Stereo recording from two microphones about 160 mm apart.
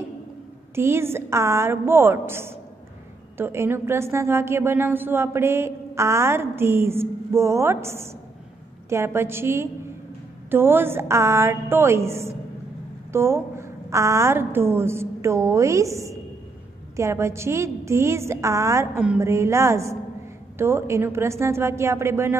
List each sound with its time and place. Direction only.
0.7 s a woman's voice: 15° right (ahead or behind)